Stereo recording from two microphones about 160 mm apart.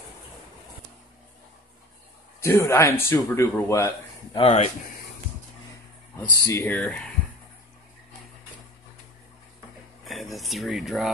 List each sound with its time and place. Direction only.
2.4 s speech: 15° left (ahead or behind)
4.4 s speech: 40° left (ahead or behind)
6.4 s speech: 15° left (ahead or behind)
10.0 s speech: centre (ahead or behind)